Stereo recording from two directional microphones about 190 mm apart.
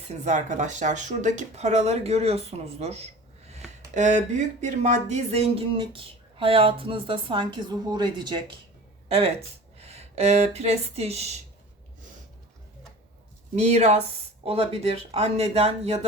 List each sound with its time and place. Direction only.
0.3 s speech: 40° right (ahead or behind)
13.6 s speech: 35° right (ahead or behind)